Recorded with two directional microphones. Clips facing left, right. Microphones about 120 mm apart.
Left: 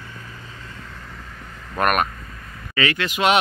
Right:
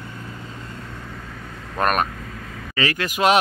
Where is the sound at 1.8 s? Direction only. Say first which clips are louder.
Left 1 dB; 30° right (ahead or behind).